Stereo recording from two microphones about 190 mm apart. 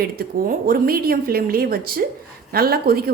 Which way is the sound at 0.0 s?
50° right (ahead or behind).